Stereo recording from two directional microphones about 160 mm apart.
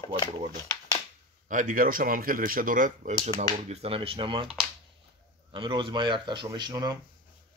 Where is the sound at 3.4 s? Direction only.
40° right (ahead or behind).